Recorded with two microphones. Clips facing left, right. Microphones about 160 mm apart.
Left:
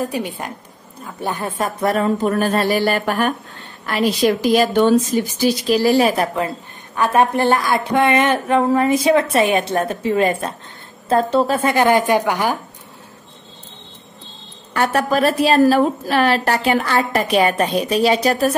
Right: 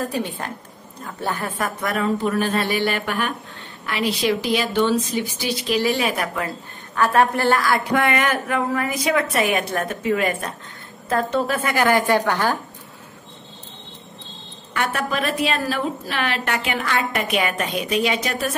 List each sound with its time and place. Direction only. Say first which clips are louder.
0.0 s a woman's voice: left 2 dB; 15° left (ahead or behind)
1.8 s a woman's voice: left 5 dB; 35° left (ahead or behind); by 12.5 s 15° left (ahead or behind)
14.7 s a woman's voice: left 6 dB; 40° left (ahead or behind)